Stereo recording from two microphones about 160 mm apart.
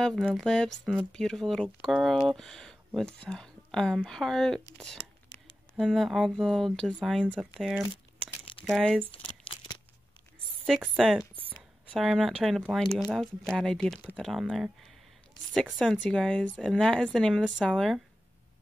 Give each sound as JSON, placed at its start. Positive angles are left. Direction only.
{"t": 0.2, "sound": "speech", "side_deg": 0}
{"t": 5.8, "sound": "speech", "side_deg": -5}
{"t": 9.1, "sound": "crumpling", "side_deg": 35}
{"t": 10.6, "sound": "speech", "side_deg": -5}